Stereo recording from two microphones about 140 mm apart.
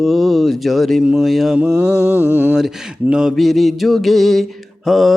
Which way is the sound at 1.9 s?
20° left (ahead or behind).